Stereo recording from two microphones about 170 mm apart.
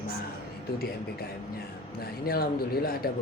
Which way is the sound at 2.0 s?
65° left (ahead or behind).